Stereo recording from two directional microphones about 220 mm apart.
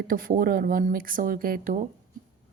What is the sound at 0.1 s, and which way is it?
Speech, 40° right (ahead or behind).